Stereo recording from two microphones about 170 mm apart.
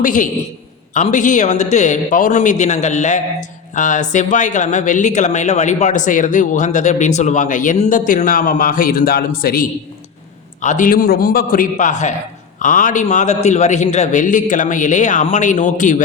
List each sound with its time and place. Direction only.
0.0 s a man's voice: 50° left (ahead or behind)
10.6 s a man's voice: 50° left (ahead or behind)